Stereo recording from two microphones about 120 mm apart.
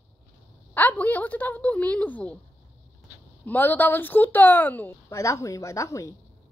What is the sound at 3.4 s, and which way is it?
A woman's voice, 15° left (ahead or behind).